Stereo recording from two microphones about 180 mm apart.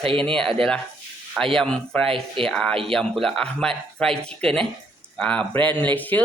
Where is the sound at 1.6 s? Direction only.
5° left (ahead or behind).